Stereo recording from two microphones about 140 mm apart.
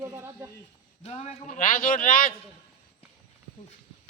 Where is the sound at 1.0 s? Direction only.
50° left (ahead or behind); by 2.3 s 80° left.